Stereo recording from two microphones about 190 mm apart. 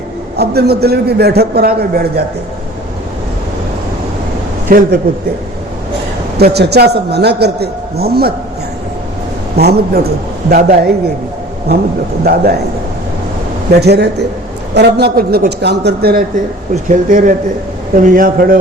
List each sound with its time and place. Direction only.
0.3 s a man's voice: 55° right (ahead or behind)
4.7 s a man's voice: 50° right (ahead or behind)
6.4 s a man's voice: 60° right (ahead or behind)
9.6 s a man's voice: 55° right (ahead or behind)
12.2 s a man's voice: 55° right (ahead or behind)
13.7 s a man's voice: 60° right (ahead or behind)
16.9 s a man's voice: 45° right (ahead or behind)